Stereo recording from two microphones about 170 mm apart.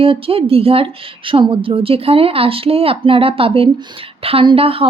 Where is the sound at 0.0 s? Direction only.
35° right (ahead or behind).